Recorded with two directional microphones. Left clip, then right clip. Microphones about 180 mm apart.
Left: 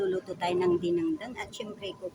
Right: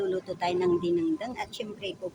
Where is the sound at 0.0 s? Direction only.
5° right (ahead or behind).